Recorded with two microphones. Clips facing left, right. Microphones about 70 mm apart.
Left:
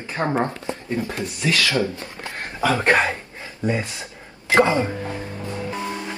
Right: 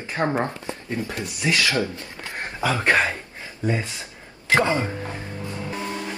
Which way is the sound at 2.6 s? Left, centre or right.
Left.